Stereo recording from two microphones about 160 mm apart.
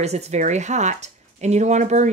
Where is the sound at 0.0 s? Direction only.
40° right (ahead or behind).